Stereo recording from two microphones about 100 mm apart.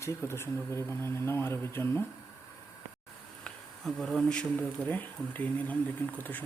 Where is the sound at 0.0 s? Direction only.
25° left (ahead or behind).